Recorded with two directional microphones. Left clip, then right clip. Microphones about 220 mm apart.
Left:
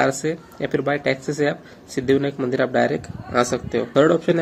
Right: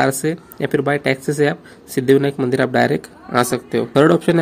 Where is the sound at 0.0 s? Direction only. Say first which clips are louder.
Right 2 dB; 50° right (ahead or behind).